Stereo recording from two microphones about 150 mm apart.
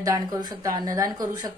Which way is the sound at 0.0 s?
25° right (ahead or behind).